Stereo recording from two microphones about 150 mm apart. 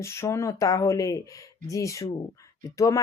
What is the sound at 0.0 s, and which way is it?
Speech, 20° left (ahead or behind).